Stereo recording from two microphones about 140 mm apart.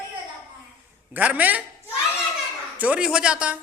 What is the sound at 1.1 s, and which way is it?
Speech, 10° right (ahead or behind).